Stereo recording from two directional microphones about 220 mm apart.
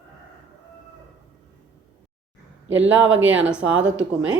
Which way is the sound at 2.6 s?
60° right (ahead or behind).